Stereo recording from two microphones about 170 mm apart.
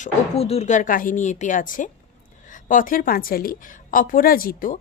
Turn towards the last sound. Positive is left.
turn(degrees=55)  # may be behind; listen again after turning